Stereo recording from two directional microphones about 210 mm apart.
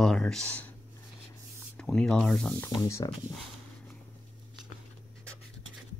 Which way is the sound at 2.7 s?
15° left (ahead or behind).